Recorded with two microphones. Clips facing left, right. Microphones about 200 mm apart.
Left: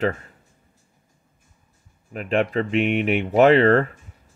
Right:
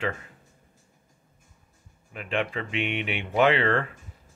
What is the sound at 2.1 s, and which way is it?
Speech, 40° left (ahead or behind).